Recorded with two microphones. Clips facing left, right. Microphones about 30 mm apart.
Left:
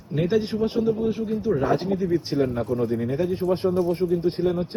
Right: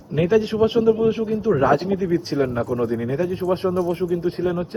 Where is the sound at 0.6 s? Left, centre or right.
Right.